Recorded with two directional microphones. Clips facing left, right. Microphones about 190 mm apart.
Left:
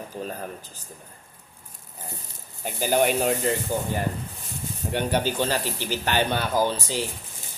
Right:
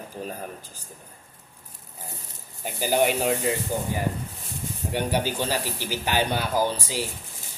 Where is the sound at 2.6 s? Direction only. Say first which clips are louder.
Left 1 dB; 10° right (ahead or behind).